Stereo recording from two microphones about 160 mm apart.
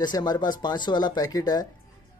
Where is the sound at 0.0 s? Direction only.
25° left (ahead or behind).